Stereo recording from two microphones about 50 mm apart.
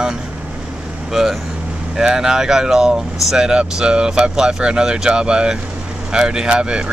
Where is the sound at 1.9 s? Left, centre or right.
Centre.